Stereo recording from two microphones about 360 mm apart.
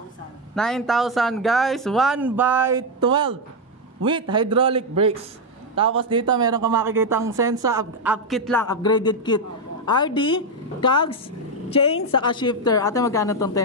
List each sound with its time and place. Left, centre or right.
0.6 s a woman's voice: centre